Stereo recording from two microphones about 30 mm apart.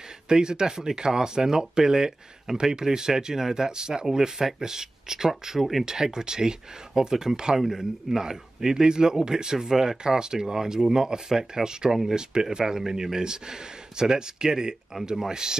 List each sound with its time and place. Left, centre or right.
0.3 s speech: right